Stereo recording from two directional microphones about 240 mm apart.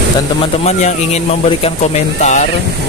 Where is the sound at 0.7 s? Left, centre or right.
Left.